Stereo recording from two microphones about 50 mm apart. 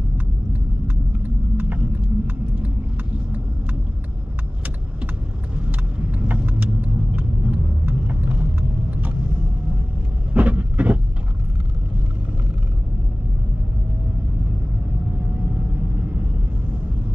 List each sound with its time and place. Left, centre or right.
0.5 s vehicle: right
5.7 s car: right
10.3 s vehicle: right
15.5 s vehicle: right